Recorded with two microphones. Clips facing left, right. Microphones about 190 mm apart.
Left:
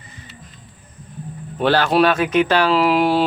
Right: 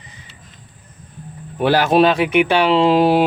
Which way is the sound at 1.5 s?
15° right (ahead or behind).